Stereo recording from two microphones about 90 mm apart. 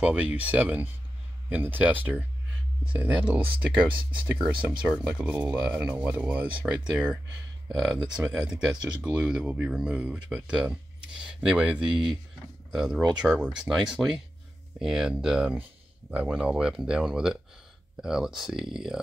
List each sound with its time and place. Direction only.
0.0 s speech: 15° right (ahead or behind)
5.1 s speech: 20° right (ahead or behind)
7.7 s speech: centre (ahead or behind)
8.0 s speech: 15° right (ahead or behind)